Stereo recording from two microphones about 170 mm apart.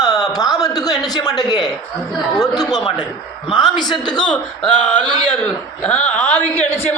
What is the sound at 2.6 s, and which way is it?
A woman's voice, 25° left (ahead or behind).